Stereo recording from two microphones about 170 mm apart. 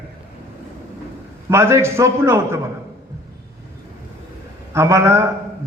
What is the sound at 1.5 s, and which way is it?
A man's voice, 15° right (ahead or behind).